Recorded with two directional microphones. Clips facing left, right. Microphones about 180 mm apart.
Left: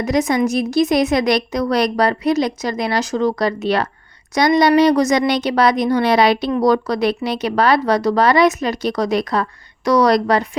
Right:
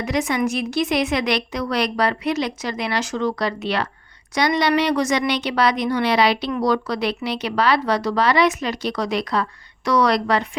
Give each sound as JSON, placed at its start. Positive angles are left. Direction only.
{"t": 0.0, "sound": "a woman's voice", "side_deg": 40}